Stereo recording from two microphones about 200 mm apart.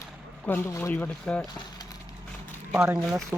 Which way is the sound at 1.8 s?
20° left (ahead or behind).